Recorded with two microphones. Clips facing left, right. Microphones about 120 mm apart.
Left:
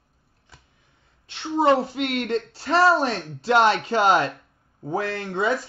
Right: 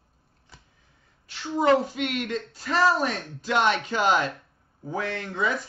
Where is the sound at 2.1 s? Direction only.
35° left (ahead or behind).